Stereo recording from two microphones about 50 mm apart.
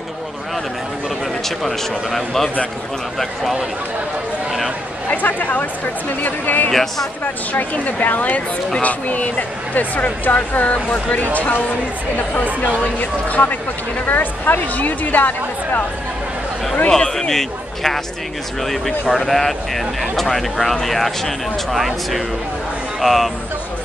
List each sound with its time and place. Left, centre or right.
1.6 s speech: centre
5.1 s speech: left
6.7 s speech: centre
7.5 s speech: left
12.6 s speech: left
16.9 s speech: centre